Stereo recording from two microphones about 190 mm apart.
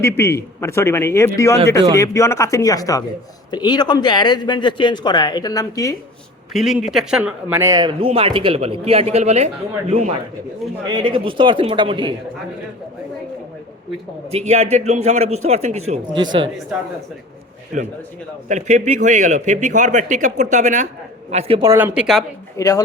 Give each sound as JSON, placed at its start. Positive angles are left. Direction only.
{"t": 0.0, "sound": "speech", "side_deg": 15}
{"t": 6.5, "sound": "speech", "side_deg": 0}
{"t": 10.8, "sound": "speech", "side_deg": -25}
{"t": 14.3, "sound": "speech", "side_deg": -35}
{"t": 15.9, "sound": "speech", "side_deg": -25}
{"t": 18.4, "sound": "speech", "side_deg": -40}
{"t": 21.6, "sound": "speech", "side_deg": -15}
{"t": 22.5, "sound": "speech", "side_deg": 15}